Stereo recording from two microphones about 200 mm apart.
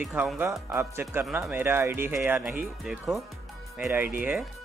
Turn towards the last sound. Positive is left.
turn(degrees=-10)  # may be behind; listen again after turning